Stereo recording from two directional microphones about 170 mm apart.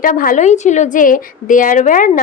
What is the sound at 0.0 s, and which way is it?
A woman's voice, 55° left (ahead or behind).